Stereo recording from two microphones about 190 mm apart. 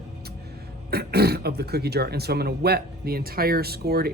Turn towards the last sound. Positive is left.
turn(degrees=-55)  # may be behind; listen again after turning